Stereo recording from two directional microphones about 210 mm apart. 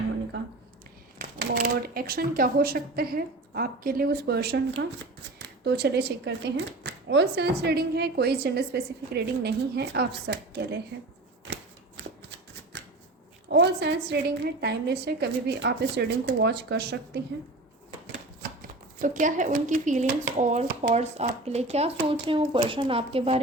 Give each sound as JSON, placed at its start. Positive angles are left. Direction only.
{"t": 1.2, "sound": "speech", "side_deg": -45}
{"t": 13.5, "sound": "speech", "side_deg": -55}
{"t": 18.9, "sound": "speech", "side_deg": -40}